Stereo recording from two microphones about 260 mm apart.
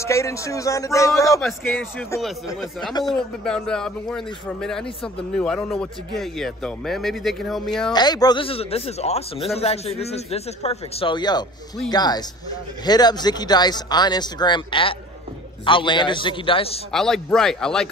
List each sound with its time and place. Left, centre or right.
0.0 s a man's voice: centre
2.9 s speech: centre
3.4 s a man's voice: centre
7.9 s a man's voice: centre
16.9 s a man's voice: centre